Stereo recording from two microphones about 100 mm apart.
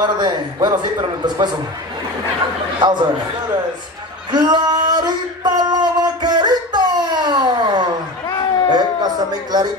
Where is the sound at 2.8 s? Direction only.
45° right (ahead or behind).